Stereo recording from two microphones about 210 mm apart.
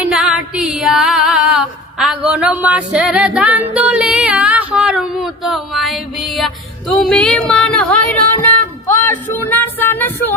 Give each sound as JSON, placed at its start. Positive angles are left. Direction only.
{"t": 0.0, "sound": "female singing", "side_deg": -5}
{"t": 8.9, "sound": "speech", "side_deg": 10}